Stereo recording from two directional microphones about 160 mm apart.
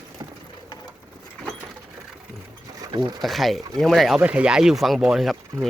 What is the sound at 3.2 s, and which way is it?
Speech, centre (ahead or behind).